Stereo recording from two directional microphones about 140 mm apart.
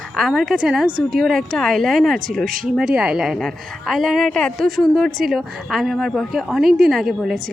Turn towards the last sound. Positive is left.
turn(degrees=0)  # may be behind; listen again after turning